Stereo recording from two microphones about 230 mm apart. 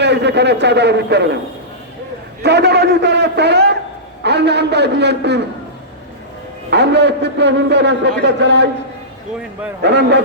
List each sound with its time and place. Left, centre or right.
0.0 s a man's voice: right
2.4 s a man's voice: right
6.7 s a man's voice: right
9.8 s a man's voice: right